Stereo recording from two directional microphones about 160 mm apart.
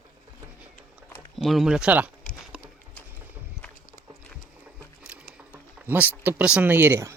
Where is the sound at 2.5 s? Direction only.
Centre (ahead or behind).